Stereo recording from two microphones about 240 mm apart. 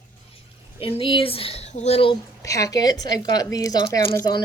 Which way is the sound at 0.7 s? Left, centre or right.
Left.